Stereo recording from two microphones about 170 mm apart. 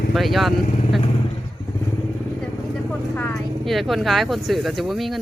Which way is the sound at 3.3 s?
Centre (ahead or behind).